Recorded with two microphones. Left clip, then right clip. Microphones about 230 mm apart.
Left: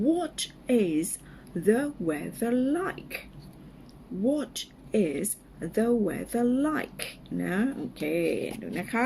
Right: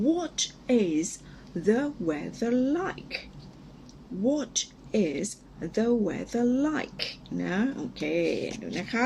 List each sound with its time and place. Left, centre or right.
0.0 s a woman's voice: centre
4.3 s speech: centre